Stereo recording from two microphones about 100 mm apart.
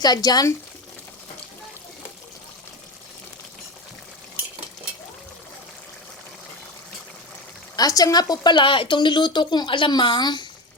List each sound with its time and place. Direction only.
0.0 s speech: 40° left (ahead or behind)
7.8 s speech: 35° left (ahead or behind)